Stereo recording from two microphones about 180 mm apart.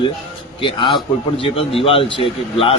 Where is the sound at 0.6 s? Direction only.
30° left (ahead or behind).